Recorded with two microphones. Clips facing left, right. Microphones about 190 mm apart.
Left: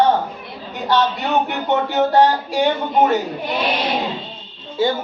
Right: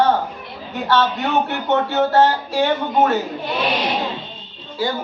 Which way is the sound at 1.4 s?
15° left (ahead or behind).